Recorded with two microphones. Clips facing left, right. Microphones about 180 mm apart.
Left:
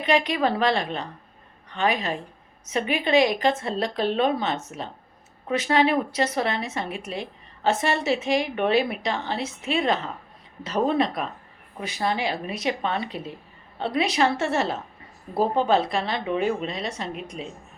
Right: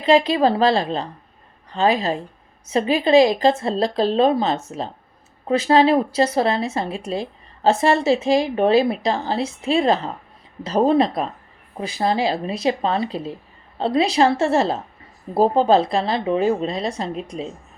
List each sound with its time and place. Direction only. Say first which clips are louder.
0.0 s speech: right 6 dB; 30° right (ahead or behind)